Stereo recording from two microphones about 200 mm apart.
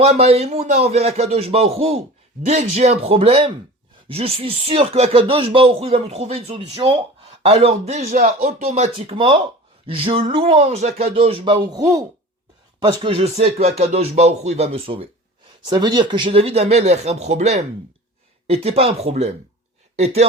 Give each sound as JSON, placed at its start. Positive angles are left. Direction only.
{"t": 0.0, "sound": "speech", "side_deg": -30}
{"t": 8.2, "sound": "speech", "side_deg": -45}